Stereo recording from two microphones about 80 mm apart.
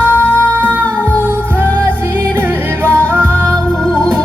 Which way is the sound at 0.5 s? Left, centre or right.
Right.